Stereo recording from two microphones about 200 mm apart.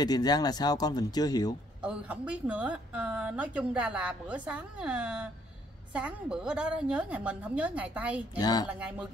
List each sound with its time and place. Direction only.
0.0 s speech: 20° left (ahead or behind)
1.8 s a woman's voice: 5° right (ahead or behind)
8.4 s speech: 20° left (ahead or behind)
8.6 s a woman's voice: 5° right (ahead or behind)